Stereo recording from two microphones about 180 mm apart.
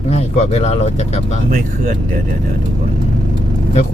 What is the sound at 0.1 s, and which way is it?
Speech, 35° left (ahead or behind).